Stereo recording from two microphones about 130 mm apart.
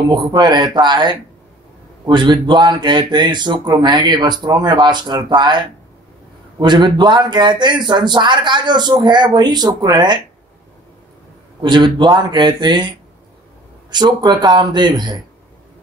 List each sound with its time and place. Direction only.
0.1 s speech: 35° right (ahead or behind)
11.6 s speech: 35° right (ahead or behind)